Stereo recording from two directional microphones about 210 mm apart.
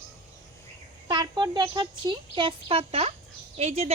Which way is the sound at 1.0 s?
20° right (ahead or behind).